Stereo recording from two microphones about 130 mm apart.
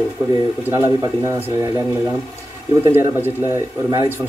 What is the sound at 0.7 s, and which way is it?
Speech, 20° right (ahead or behind).